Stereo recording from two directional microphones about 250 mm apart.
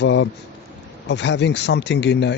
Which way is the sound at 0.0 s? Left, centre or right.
Left.